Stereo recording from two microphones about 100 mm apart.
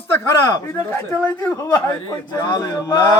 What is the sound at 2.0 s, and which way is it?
Speech, 45° left (ahead or behind).